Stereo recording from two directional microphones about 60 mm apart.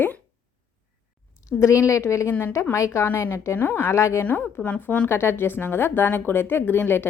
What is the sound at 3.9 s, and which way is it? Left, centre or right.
Speech, left.